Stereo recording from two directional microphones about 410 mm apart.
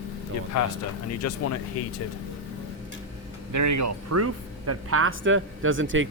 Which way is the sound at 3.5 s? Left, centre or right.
Right.